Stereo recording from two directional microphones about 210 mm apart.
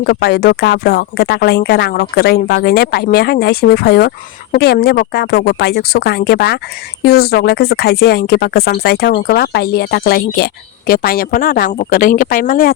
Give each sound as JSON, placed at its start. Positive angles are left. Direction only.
{"t": 0.0, "sound": "speech", "side_deg": 50}